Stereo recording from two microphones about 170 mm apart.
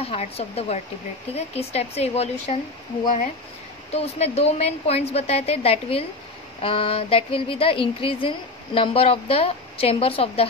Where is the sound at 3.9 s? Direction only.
40° left (ahead or behind).